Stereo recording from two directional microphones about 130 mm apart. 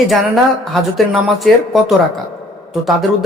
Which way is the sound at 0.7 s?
Centre (ahead or behind).